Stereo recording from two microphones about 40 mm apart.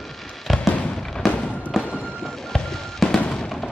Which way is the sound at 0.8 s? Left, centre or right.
Centre.